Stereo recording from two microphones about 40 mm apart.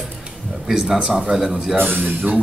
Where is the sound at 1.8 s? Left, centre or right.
Right.